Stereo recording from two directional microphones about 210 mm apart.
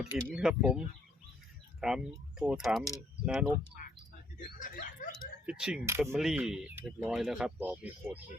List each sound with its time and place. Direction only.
0.3 s speech: 5° right (ahead or behind)
4.4 s a sound: 40° left (ahead or behind)
5.5 s speech: 5° right (ahead or behind)
6.1 s speech: centre (ahead or behind)